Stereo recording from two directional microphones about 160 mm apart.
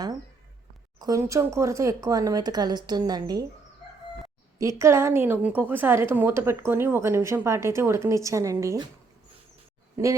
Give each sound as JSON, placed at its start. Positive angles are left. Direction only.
{"t": 0.9, "sound": "speech", "side_deg": -20}
{"t": 4.8, "sound": "a woman's voice", "side_deg": -15}